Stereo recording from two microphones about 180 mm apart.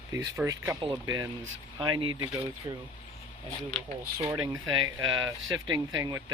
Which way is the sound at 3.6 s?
Centre (ahead or behind).